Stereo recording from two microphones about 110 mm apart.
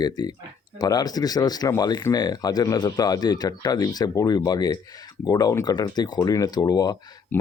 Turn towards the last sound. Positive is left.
turn(degrees=35)  # may be behind; listen again after turning